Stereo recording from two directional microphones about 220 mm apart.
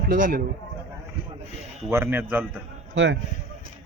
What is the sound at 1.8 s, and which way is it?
Speech, 10° right (ahead or behind).